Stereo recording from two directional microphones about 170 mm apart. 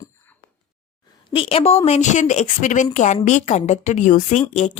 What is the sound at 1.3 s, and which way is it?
A woman's voice, 30° left (ahead or behind).